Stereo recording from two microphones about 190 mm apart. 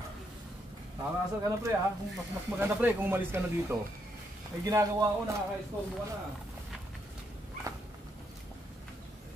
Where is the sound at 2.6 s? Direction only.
10° right (ahead or behind).